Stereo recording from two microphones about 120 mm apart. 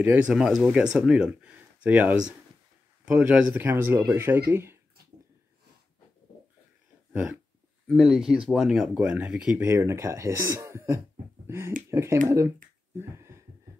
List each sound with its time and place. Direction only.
0.3 s speech: 5° right (ahead or behind)
7.9 s speech: 5° right (ahead or behind)
9.7 s speech: 25° right (ahead or behind)
12.9 s finger snapping: 20° right (ahead or behind)